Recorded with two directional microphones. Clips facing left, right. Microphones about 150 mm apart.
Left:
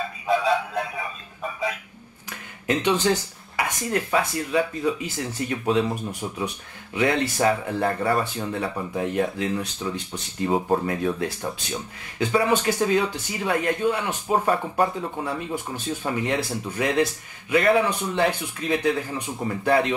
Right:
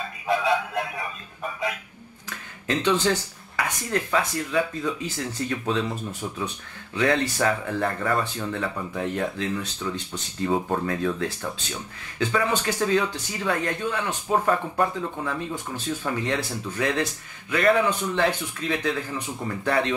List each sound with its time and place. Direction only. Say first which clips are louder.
0.5 s music: left 1 dB; centre (ahead or behind)
2.6 s speech: left 1 dB; 15° left (ahead or behind)